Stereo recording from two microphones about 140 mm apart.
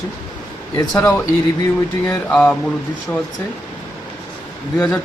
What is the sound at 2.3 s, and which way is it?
Speech, 5° left (ahead or behind).